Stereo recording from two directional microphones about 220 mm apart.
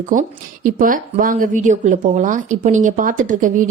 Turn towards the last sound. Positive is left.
turn(degrees=-35)  # may be behind; listen again after turning